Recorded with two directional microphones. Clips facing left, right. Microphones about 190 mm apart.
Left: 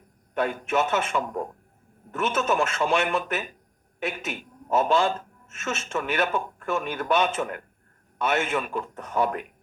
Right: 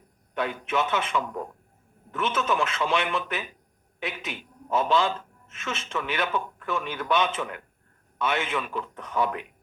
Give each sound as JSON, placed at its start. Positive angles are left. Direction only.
{"t": 0.3, "sound": "a woman's voice", "side_deg": 45}